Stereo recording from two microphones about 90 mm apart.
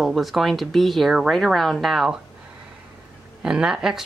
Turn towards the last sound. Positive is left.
turn(degrees=-5)  # may be behind; listen again after turning